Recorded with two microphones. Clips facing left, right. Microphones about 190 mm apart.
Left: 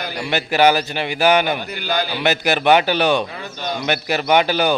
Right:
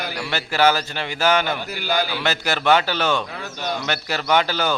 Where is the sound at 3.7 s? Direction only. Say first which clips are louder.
Left 6 dB; 15° left (ahead or behind).